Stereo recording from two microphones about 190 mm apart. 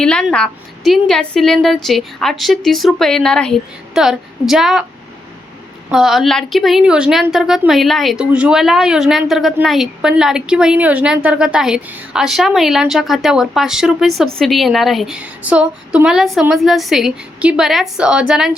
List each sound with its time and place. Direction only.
0.0 s a woman's voice: 5° left (ahead or behind)
5.9 s a woman's voice: 5° right (ahead or behind)